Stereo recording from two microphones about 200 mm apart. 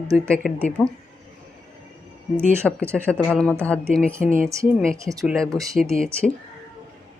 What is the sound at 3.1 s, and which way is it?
Speech, 5° left (ahead or behind).